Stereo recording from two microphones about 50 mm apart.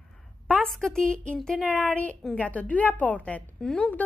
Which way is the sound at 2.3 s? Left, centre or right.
Left.